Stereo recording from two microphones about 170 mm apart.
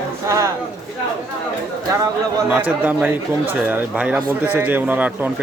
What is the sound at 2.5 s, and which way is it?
Speech, 10° right (ahead or behind).